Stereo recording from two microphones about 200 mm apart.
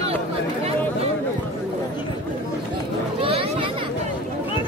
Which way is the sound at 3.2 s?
25° right (ahead or behind).